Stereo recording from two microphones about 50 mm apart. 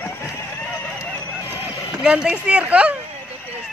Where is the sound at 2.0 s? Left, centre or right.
Centre.